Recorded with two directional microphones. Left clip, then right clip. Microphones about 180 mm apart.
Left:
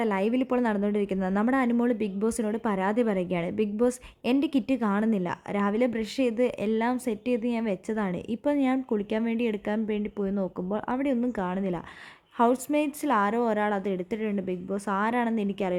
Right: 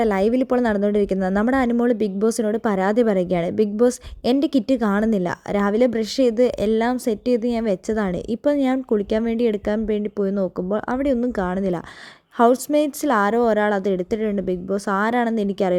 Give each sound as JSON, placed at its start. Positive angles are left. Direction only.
{"t": 0.0, "sound": "speech", "side_deg": -20}